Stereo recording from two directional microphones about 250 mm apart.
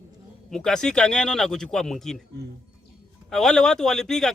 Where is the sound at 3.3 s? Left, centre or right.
Centre.